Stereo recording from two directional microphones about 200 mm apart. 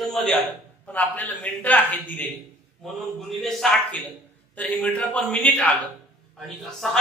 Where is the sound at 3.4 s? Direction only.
5° left (ahead or behind).